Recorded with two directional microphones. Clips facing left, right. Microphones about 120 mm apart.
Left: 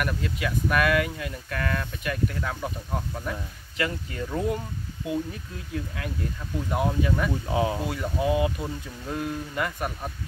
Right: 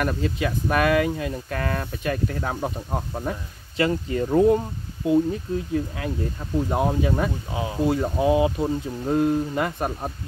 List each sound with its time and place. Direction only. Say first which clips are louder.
0.0 s speech: right 5 dB; 30° right (ahead or behind)